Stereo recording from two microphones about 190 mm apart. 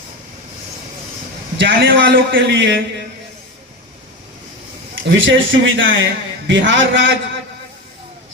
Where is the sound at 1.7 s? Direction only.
55° right (ahead or behind).